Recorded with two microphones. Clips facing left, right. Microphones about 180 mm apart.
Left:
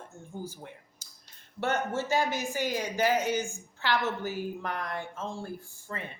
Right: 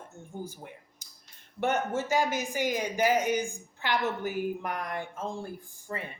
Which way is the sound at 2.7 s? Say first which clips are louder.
Right 1 dB; 15° right (ahead or behind).